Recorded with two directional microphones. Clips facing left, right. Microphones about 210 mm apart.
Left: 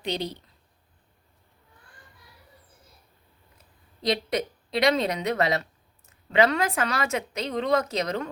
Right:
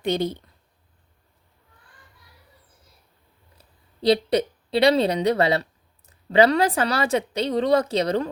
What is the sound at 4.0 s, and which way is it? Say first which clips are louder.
Speech: right 7 dB; 30° right (ahead or behind).